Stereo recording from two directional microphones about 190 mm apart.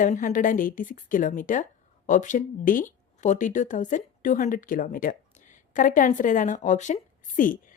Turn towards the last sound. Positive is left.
turn(degrees=45)  # may be behind; listen again after turning